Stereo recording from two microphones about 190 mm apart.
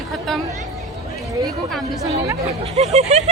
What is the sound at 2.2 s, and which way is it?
Speech, 15° right (ahead or behind).